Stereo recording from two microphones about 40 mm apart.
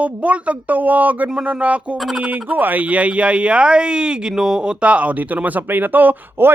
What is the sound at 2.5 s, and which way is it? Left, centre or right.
Speech, right.